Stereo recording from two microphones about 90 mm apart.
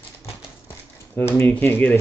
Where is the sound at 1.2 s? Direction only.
25° left (ahead or behind).